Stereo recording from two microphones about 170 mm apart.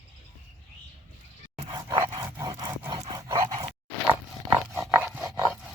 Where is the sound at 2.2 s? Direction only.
20° right (ahead or behind).